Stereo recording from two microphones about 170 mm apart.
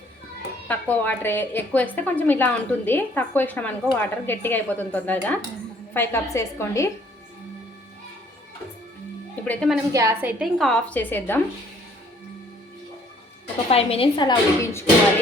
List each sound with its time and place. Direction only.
0.7 s a woman's voice: 10° left (ahead or behind)
9.4 s a woman's voice: 5° left (ahead or behind)
9.9 s a woman's voice: 20° right (ahead or behind); by 11.3 s 10° left (ahead or behind)
13.7 s speech: 35° left (ahead or behind); by 14.8 s 15° left (ahead or behind)